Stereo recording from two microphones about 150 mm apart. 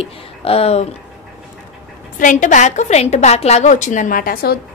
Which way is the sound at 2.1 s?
60° left (ahead or behind).